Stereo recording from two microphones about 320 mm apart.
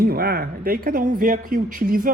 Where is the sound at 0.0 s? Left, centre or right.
Right.